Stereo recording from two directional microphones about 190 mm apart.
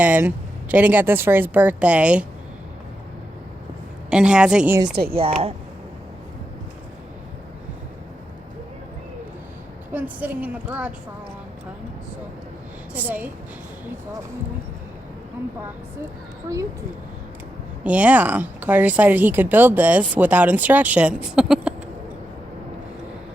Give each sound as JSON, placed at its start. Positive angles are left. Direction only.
{"t": 0.0, "sound": "speech", "side_deg": -10}
{"t": 4.1, "sound": "a woman's voice", "side_deg": -5}
{"t": 5.1, "sound": "speech", "side_deg": -30}
{"t": 9.9, "sound": "speech", "side_deg": -10}
{"t": 12.9, "sound": "speech", "side_deg": -10}
{"t": 17.8, "sound": "speech", "side_deg": -5}
{"t": 21.3, "sound": "a sound", "side_deg": -5}